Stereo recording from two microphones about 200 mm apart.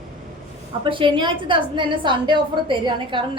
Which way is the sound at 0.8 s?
25° right (ahead or behind).